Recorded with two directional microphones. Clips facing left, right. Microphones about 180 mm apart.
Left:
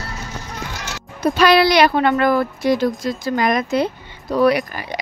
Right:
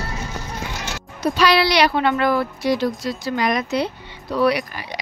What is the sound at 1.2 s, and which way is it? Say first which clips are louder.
Speech: left 4 dB; 50° left (ahead or behind).